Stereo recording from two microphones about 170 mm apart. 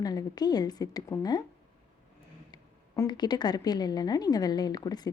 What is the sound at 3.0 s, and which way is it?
A woman's voice, 25° left (ahead or behind).